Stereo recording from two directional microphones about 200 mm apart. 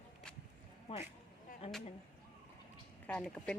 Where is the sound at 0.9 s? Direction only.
30° left (ahead or behind).